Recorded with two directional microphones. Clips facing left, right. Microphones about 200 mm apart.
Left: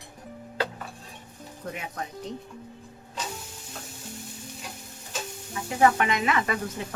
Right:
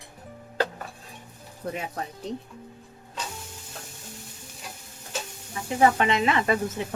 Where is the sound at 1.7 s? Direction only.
35° right (ahead or behind).